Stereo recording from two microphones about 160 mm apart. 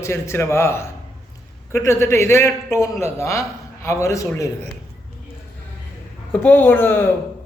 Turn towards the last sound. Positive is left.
turn(degrees=15)  # may be behind; listen again after turning